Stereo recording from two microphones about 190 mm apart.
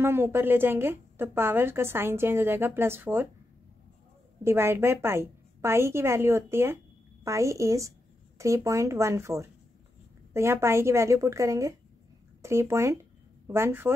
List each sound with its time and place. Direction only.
0.0 s a woman's voice: 10° right (ahead or behind)
4.4 s a woman's voice: 15° right (ahead or behind)